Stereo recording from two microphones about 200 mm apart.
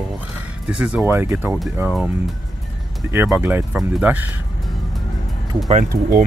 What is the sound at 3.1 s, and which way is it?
Speech, 10° right (ahead or behind).